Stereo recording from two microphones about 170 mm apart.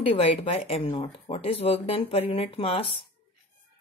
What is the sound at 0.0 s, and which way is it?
A woman's voice, 35° left (ahead or behind).